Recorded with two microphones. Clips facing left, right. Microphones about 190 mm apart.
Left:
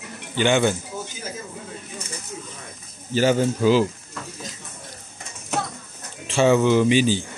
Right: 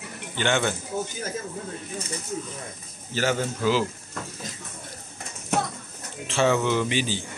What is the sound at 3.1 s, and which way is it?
Speech, 15° left (ahead or behind).